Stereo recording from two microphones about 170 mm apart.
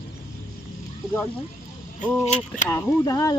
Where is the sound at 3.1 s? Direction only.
20° left (ahead or behind).